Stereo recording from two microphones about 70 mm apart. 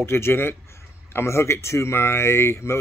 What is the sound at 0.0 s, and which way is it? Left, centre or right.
Speech, left.